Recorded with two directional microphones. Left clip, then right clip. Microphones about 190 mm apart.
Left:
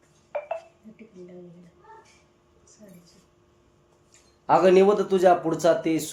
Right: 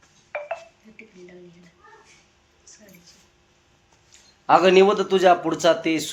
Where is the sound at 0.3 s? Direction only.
5° right (ahead or behind).